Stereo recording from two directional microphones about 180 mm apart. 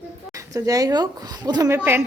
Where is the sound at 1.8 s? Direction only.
10° right (ahead or behind).